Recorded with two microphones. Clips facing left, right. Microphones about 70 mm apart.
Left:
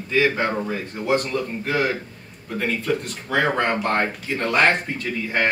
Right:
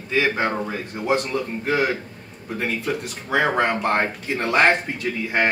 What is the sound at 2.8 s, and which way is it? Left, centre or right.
A man's voice, centre.